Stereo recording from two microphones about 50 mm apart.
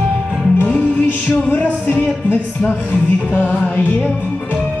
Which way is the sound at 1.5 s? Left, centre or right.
Left.